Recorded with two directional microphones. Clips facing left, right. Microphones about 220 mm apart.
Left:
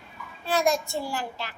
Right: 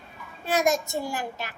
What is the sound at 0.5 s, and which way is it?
Child singing, 20° right (ahead or behind).